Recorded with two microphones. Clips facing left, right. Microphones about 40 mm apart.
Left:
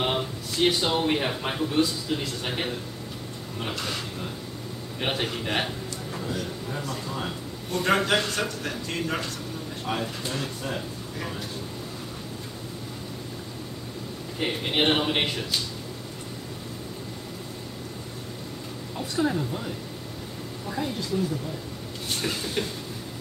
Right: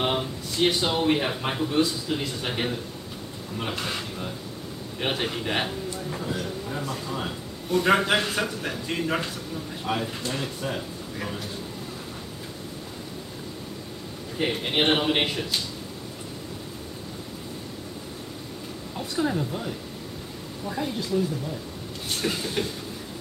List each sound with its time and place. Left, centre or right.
0.0 s speech: centre
3.7 s a man's voice: centre
4.9 s a man's voice: centre
14.4 s a man's voice: centre
18.9 s a man's voice: centre
22.1 s a man's voice: centre